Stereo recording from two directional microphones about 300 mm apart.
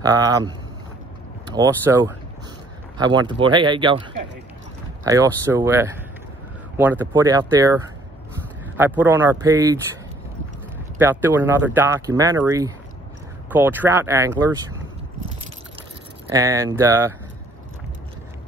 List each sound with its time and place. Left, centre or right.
0.0 s speech: centre
5.0 s speech: centre
11.0 s speech: centre
16.3 s speech: centre